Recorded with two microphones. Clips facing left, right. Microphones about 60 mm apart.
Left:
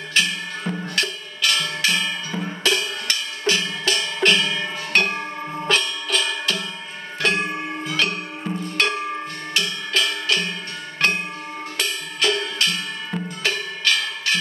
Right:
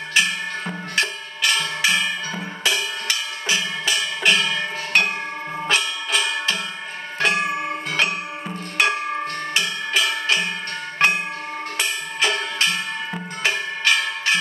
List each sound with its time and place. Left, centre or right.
0.1 s music: centre
5.6 s music: centre
7.2 s a sound: centre
8.5 s music: centre